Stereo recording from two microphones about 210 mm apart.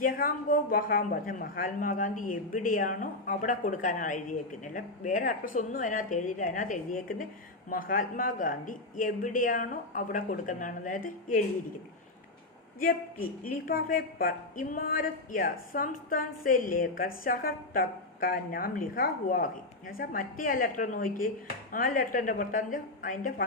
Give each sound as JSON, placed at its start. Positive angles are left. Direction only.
{"t": 0.0, "sound": "a woman's voice", "side_deg": 40}
{"t": 12.8, "sound": "a woman's voice", "side_deg": 40}